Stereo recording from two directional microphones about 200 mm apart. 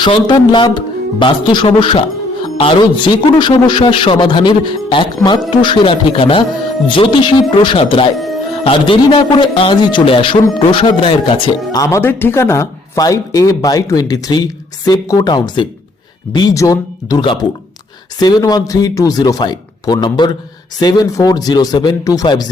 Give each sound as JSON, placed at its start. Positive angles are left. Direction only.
{"t": 0.0, "sound": "speech", "side_deg": 25}
{"t": 8.1, "sound": "speech", "side_deg": 0}
{"t": 8.6, "sound": "speech", "side_deg": 25}